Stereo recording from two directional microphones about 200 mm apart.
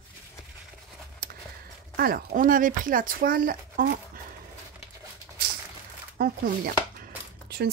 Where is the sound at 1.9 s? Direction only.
45° right (ahead or behind).